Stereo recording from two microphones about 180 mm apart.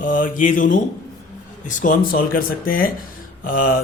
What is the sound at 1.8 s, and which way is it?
Speech, 50° left (ahead or behind).